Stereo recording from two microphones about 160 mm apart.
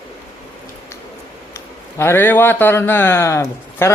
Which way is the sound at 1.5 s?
15° left (ahead or behind).